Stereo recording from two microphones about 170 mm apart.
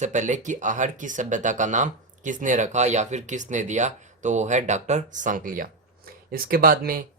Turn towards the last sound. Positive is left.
turn(degrees=-60)  # may be behind; listen again after turning